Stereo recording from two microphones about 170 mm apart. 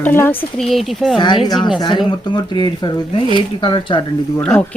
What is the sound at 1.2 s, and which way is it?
Speech, 25° left (ahead or behind).